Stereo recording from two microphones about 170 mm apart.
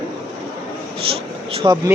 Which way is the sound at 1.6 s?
25° right (ahead or behind).